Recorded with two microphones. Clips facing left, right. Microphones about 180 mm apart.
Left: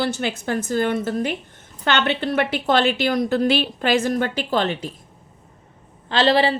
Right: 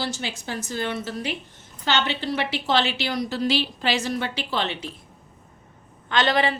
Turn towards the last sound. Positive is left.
turn(degrees=30)  # may be behind; listen again after turning